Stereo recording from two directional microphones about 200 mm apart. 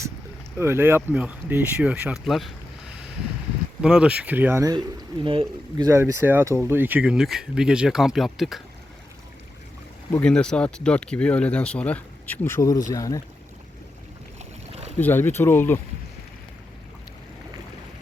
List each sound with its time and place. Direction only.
0.6 s speech: 10° right (ahead or behind)
3.8 s speech: 5° right (ahead or behind)
10.1 s speech: 5° left (ahead or behind)
14.3 s boat: 30° right (ahead or behind)
14.9 s speech: 10° left (ahead or behind)